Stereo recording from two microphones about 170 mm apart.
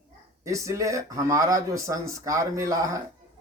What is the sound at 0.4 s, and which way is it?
Speech, 20° right (ahead or behind).